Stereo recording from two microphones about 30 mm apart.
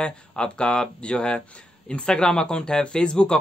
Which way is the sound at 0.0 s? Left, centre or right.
Left.